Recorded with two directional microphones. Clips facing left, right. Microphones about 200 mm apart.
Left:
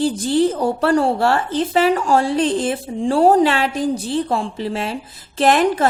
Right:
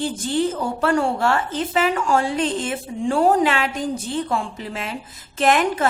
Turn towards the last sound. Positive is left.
turn(degrees=35)  # may be behind; listen again after turning